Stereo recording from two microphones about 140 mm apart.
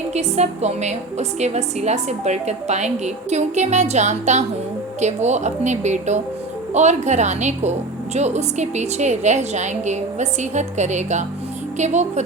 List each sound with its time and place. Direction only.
0.1 s a woman's voice: 50° right (ahead or behind)